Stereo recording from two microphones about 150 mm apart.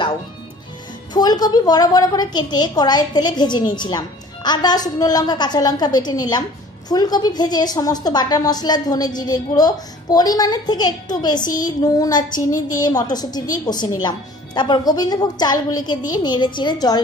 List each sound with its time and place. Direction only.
1.1 s a woman's voice: 25° left (ahead or behind)